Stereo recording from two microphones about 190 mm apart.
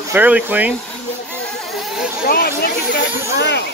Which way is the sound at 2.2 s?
50° left (ahead or behind).